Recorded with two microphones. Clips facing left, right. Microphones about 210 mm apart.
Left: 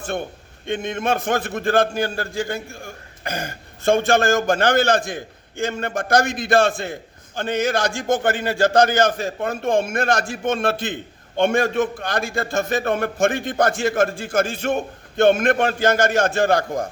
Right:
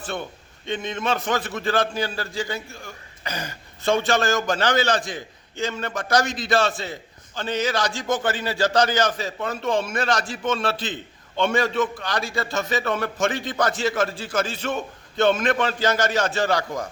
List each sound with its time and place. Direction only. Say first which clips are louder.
0.0 s a man's voice: left 4 dB; 50° left (ahead or behind)